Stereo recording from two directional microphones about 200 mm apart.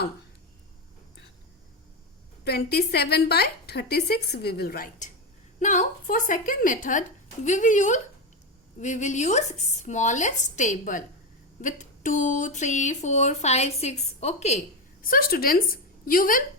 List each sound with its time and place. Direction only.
2.4 s a woman's voice: 55° left (ahead or behind); by 14.6 s 35° left (ahead or behind)
15.0 s a woman's voice: 45° left (ahead or behind)